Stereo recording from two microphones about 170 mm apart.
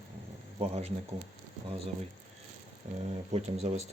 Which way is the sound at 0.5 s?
35° right (ahead or behind).